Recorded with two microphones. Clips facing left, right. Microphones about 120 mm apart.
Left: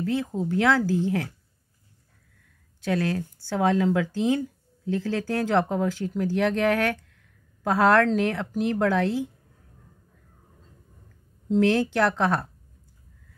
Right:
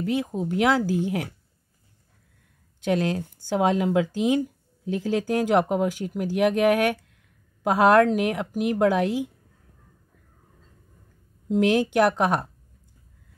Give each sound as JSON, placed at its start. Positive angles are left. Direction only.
{"t": 0.0, "sound": "speech", "side_deg": -15}
{"t": 2.8, "sound": "speech", "side_deg": -20}
{"t": 11.4, "sound": "speech", "side_deg": -15}